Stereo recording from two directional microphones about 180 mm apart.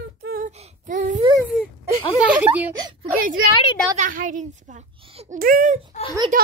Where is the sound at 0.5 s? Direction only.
40° right (ahead or behind).